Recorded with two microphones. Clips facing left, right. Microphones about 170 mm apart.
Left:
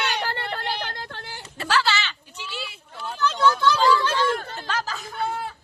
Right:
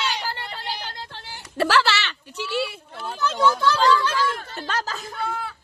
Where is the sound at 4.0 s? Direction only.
25° left (ahead or behind).